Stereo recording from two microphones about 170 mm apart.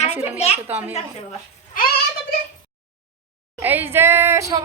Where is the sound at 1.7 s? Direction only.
55° left (ahead or behind).